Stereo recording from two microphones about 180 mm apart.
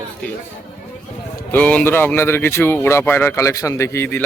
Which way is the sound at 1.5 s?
10° left (ahead or behind).